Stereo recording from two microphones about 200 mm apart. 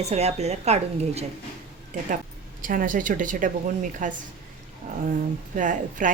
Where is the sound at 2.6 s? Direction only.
45° right (ahead or behind).